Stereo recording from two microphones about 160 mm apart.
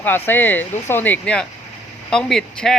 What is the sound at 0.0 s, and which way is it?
Speech, 10° left (ahead or behind).